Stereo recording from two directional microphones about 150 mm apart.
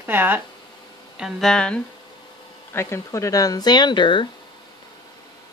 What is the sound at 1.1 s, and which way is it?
Speech, centre (ahead or behind).